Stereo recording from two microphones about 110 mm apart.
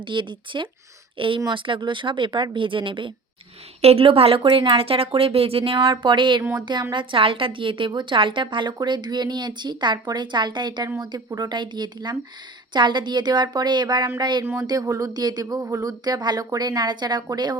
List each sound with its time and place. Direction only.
0.0 s a woman's voice: 45° right (ahead or behind)
3.8 s speech: 65° right (ahead or behind)
5.7 s speech: 35° right (ahead or behind)
6.0 s a woman's voice: 45° right (ahead or behind)
10.8 s speech: 30° right (ahead or behind)
14.4 s speech: 30° right (ahead or behind)